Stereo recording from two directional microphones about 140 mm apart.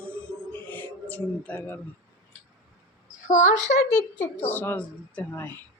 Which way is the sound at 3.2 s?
65° left (ahead or behind).